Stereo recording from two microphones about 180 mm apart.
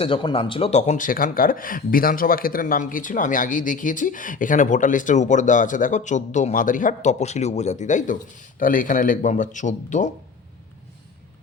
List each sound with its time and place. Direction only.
0.0 s speech: 30° left (ahead or behind); by 10.1 s 45° left (ahead or behind)